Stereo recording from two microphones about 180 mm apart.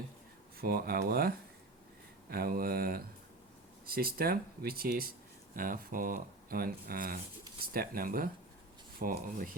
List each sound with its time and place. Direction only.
0.6 s speech: 60° right (ahead or behind)
2.3 s speech: 55° right (ahead or behind)